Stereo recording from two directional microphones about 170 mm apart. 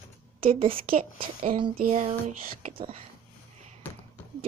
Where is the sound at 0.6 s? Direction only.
30° right (ahead or behind).